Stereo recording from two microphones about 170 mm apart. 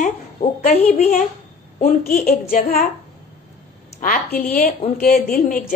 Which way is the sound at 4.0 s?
55° left (ahead or behind).